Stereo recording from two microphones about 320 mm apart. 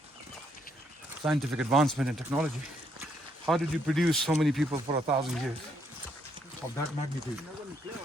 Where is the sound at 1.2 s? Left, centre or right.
Centre.